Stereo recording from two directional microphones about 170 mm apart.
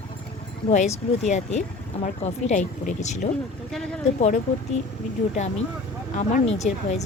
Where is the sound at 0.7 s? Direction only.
40° left (ahead or behind).